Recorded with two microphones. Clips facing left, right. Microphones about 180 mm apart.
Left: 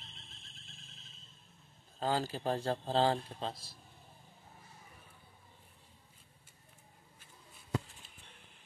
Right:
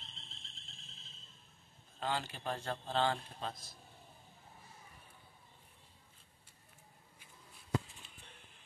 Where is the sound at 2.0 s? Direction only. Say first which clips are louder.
Left 5 dB; 35° left (ahead or behind).